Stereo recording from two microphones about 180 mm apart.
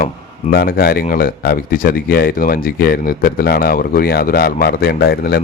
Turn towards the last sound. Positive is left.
turn(degrees=60)  # may be behind; listen again after turning